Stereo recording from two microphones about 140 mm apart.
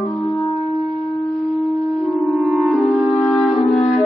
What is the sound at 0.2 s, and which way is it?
Music, 25° left (ahead or behind).